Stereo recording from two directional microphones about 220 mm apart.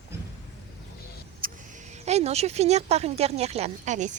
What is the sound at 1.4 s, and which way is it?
Vehicle, 40° right (ahead or behind).